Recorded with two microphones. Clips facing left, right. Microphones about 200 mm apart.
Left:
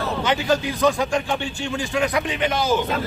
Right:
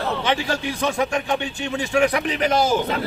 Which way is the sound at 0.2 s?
30° right (ahead or behind).